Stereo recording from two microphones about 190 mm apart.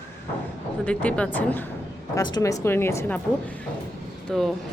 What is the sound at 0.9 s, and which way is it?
Speech, 5° left (ahead or behind).